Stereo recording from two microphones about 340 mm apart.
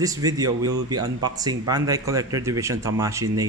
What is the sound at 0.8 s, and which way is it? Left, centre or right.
A man's voice, centre.